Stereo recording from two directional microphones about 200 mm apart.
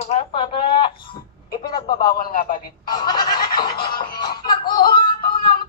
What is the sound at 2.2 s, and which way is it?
Speech, 40° left (ahead or behind).